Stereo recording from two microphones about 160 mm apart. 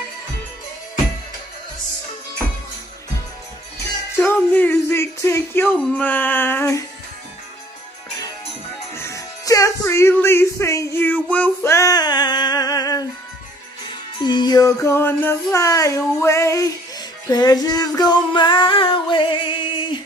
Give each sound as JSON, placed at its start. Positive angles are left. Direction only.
{"t": 4.2, "sound": "speech", "side_deg": 5}
{"t": 8.9, "sound": "music", "side_deg": 15}
{"t": 14.2, "sound": "music", "side_deg": 30}